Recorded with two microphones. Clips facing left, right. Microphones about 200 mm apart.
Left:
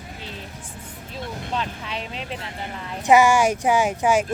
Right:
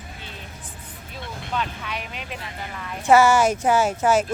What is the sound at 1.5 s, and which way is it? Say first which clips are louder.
Speech: right 1 dB; 30° left (ahead or behind).